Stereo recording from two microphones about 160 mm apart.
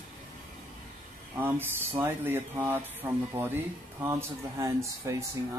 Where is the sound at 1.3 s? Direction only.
15° right (ahead or behind).